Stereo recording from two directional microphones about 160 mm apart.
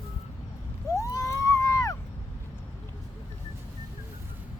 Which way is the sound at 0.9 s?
20° left (ahead or behind).